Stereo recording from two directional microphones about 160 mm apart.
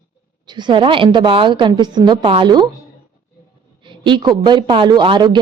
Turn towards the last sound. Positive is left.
turn(degrees=-30)  # may be behind; listen again after turning